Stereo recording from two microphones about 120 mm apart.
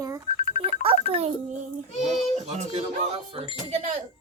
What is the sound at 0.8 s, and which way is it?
Speech, 55° right (ahead or behind).